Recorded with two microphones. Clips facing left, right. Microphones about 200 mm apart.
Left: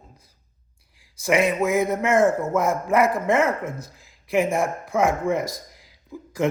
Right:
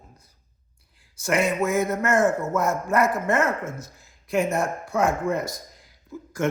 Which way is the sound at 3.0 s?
90° left.